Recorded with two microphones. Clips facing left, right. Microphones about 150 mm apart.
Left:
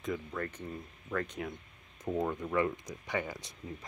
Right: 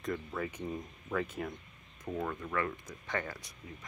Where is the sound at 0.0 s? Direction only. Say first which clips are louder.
Even; centre (ahead or behind).